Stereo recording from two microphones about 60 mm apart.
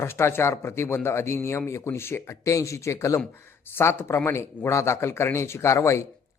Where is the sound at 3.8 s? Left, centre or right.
Left.